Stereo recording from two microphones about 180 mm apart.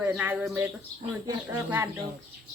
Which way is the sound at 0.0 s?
10° right (ahead or behind).